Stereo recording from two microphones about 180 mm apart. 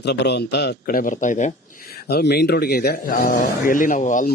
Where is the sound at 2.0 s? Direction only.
65° left (ahead or behind).